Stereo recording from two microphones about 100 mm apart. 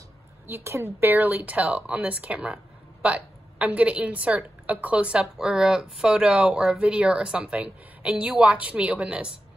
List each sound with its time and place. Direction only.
0.7 s speech: 25° right (ahead or behind)